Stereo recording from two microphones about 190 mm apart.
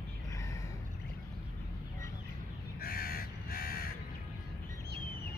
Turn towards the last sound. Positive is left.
turn(degrees=50)  # may be behind; listen again after turning